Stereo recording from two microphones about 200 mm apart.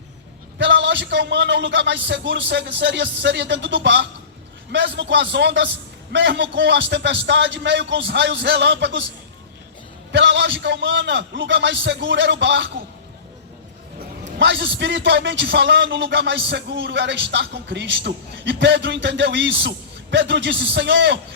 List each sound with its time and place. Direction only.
0.6 s a man's voice: 60° right (ahead or behind)
10.1 s a man's voice: 60° right (ahead or behind)
14.3 s a man's voice: 65° right (ahead or behind)